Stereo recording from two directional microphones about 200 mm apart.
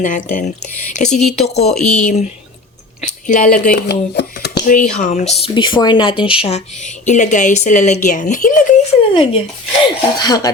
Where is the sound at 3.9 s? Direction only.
55° left (ahead or behind).